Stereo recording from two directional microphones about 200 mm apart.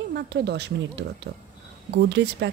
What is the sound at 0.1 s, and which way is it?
Speech, 55° right (ahead or behind).